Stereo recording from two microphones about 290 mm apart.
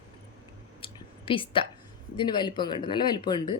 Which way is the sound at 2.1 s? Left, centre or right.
Centre.